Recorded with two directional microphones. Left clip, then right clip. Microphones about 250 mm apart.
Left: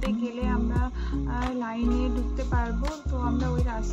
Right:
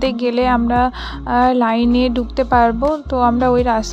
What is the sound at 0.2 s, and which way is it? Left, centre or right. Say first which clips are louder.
Speech: right 15 dB; right.